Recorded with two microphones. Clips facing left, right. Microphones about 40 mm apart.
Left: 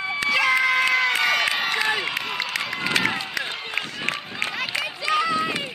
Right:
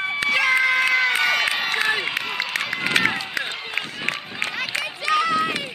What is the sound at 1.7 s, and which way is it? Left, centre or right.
Run, centre.